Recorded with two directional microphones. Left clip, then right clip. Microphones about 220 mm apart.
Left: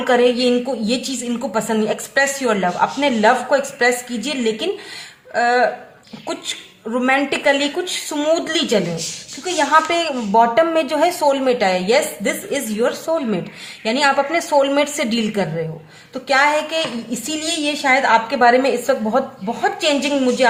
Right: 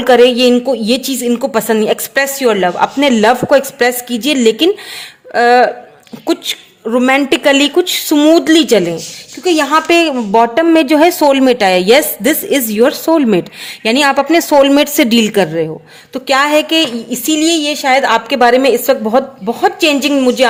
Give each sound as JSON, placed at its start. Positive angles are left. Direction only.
{"t": 0.0, "sound": "a woman's voice", "side_deg": -45}